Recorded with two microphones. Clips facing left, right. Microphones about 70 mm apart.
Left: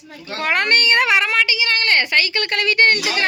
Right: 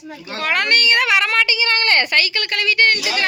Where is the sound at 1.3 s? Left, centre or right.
Centre.